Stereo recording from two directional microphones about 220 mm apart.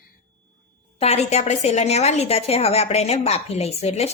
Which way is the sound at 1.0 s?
30° left (ahead or behind).